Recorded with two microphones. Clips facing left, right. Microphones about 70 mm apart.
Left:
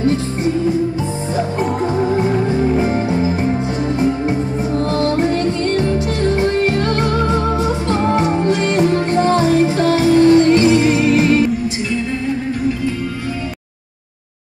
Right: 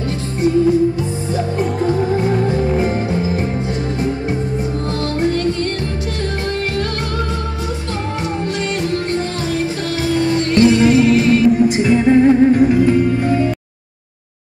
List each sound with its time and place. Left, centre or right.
8.5 s music: left
11.9 s music: right